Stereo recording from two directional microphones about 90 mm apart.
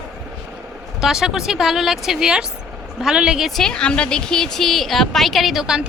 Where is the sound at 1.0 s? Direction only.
5° right (ahead or behind).